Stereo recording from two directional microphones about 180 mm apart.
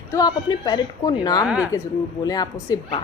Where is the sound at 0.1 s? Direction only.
20° left (ahead or behind).